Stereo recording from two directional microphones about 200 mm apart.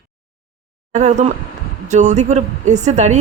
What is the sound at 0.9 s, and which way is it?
A woman's voice, 35° right (ahead or behind).